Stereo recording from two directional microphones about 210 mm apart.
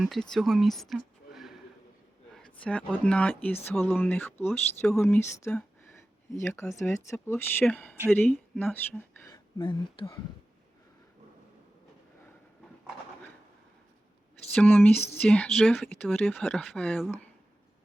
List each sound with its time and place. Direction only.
0.0 s speech: centre (ahead or behind)
2.6 s speech: 5° left (ahead or behind)
9.3 s speech: 20° left (ahead or behind)
14.5 s speech: 5° left (ahead or behind)